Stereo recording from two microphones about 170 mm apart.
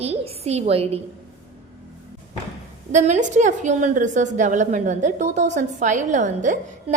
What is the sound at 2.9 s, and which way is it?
A woman's voice, 45° right (ahead or behind).